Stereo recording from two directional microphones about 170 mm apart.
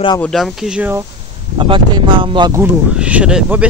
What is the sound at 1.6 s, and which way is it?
Speech, 30° right (ahead or behind).